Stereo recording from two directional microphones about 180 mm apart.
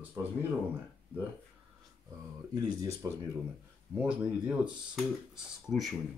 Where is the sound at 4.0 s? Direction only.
5° right (ahead or behind).